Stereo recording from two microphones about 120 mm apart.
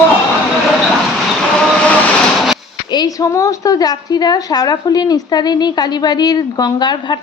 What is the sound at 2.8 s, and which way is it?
A woman's voice, 35° left (ahead or behind).